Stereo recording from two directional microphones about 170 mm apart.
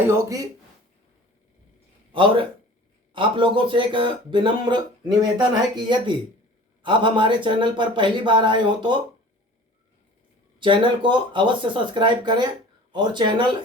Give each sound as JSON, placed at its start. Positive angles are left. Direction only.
{"t": 0.1, "sound": "speech", "side_deg": -20}
{"t": 2.1, "sound": "speech", "side_deg": -30}
{"t": 10.6, "sound": "speech", "side_deg": -30}